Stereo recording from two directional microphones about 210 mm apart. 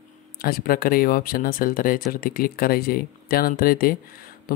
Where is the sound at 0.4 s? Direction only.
45° left (ahead or behind).